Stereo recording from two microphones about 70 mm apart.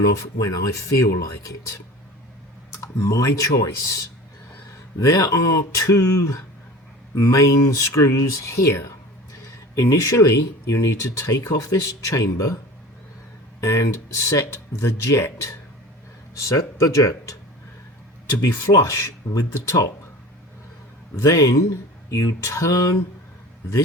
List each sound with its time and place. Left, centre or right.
0.2 s speech: left
2.8 s speech: left
13.6 s speech: left
16.3 s speech: left
18.3 s speech: left
21.2 s speech: left